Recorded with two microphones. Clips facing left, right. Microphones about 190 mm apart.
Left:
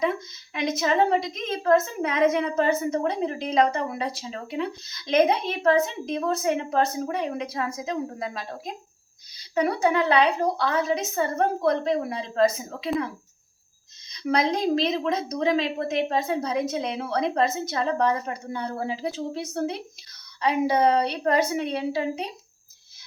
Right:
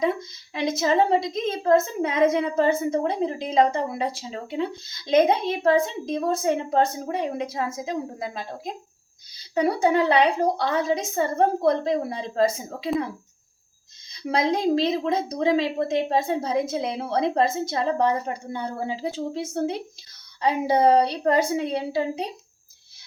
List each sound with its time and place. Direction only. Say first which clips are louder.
0.5 s a woman's voice: right 2 dB; 30° right (ahead or behind)
14.1 s a woman's voice: even; 25° right (ahead or behind)